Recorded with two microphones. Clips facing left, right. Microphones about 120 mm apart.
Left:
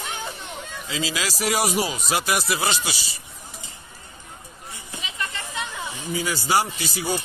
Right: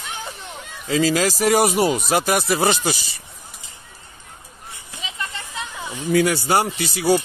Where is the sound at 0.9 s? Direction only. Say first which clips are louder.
Right 10 dB; 45° right (ahead or behind).